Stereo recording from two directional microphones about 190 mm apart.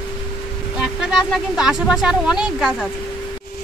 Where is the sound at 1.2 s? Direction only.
Centre (ahead or behind).